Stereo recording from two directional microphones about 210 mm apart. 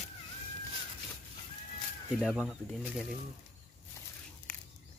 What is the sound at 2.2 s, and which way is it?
Speech, centre (ahead or behind).